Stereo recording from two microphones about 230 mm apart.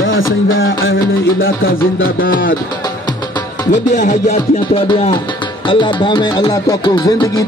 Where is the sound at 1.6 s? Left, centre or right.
Left.